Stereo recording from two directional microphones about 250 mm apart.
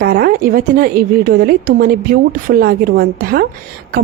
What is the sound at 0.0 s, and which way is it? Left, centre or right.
A woman's voice, right.